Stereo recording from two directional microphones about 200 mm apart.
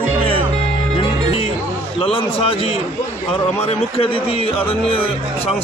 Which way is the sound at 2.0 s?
25° left (ahead or behind).